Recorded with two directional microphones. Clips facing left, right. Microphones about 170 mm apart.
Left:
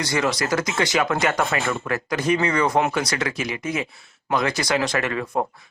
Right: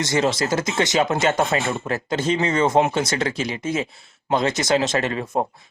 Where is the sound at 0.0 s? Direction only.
25° right (ahead or behind).